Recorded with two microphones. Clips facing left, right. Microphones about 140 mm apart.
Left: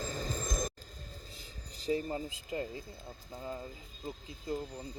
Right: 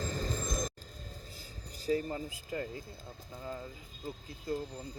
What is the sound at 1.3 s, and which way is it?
Speech, 20° left (ahead or behind).